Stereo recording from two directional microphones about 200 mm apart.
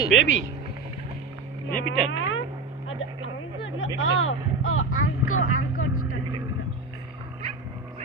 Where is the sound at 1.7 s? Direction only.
45° left (ahead or behind).